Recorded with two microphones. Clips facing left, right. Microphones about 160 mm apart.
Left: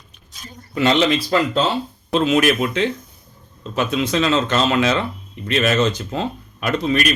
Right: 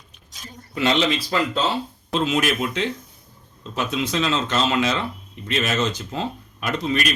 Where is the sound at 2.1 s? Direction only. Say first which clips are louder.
Left 5 dB; 65° left (ahead or behind).